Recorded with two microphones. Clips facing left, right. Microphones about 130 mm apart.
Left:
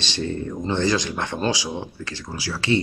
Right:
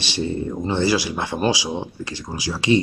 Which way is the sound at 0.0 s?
10° right (ahead or behind).